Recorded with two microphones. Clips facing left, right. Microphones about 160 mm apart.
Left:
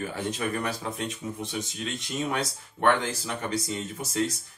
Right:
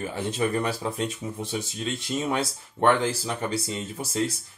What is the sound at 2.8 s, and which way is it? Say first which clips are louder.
Speech: right 2 dB; 30° right (ahead or behind).